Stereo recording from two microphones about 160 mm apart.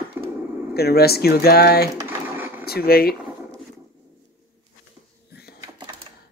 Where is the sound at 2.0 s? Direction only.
15° right (ahead or behind).